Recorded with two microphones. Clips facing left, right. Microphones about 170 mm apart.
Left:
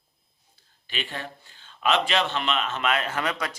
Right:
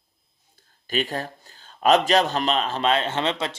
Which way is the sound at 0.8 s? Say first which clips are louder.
Right 8 dB; 40° right (ahead or behind).